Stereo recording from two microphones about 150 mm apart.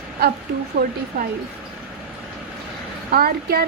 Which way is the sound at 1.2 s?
90° right.